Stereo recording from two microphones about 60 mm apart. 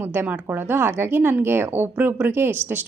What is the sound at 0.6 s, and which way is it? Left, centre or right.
A woman's voice, right.